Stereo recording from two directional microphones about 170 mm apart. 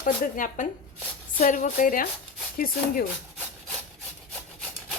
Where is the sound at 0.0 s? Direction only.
50° left (ahead or behind).